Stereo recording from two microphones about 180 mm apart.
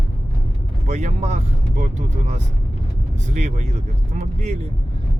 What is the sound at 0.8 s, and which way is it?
Speech, 40° right (ahead or behind).